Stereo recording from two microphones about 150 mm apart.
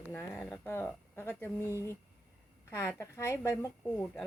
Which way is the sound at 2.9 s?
20° left (ahead or behind).